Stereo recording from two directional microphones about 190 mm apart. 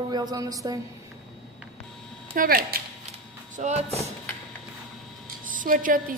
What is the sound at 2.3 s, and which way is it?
Speech, 50° right (ahead or behind).